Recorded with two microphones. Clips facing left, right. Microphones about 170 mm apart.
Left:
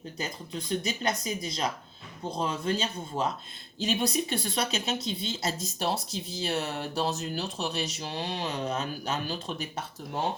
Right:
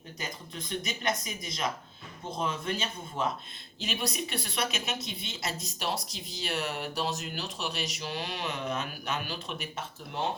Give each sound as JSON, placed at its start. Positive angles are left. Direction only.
{"t": 0.9, "sound": "speech", "side_deg": 30}